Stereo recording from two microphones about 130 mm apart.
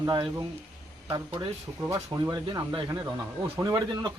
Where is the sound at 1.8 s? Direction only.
20° right (ahead or behind).